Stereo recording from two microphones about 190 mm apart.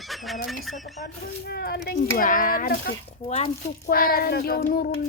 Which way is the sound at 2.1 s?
45° left (ahead or behind).